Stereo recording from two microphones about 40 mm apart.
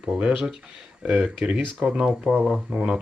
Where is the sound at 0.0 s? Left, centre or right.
Centre.